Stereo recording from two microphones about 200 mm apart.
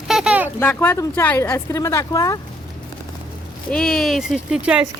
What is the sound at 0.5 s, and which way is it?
Speech, 10° left (ahead or behind).